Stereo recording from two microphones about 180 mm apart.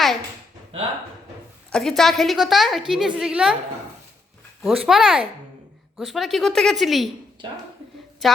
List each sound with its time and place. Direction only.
1.7 s a woman's voice: centre (ahead or behind)
4.6 s a woman's voice: centre (ahead or behind)
8.2 s a woman's voice: centre (ahead or behind)